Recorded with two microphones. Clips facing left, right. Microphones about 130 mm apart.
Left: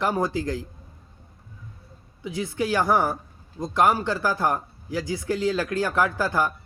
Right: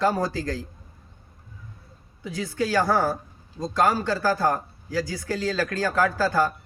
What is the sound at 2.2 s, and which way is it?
A man's voice, 20° left (ahead or behind).